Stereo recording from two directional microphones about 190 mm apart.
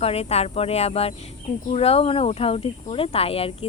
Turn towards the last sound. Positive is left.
turn(degrees=30)  # may be behind; listen again after turning